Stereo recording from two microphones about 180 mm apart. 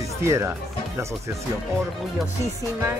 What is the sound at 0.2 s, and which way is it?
Speech, 15° right (ahead or behind).